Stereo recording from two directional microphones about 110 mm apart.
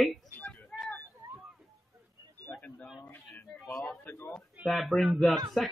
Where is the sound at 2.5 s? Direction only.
25° left (ahead or behind).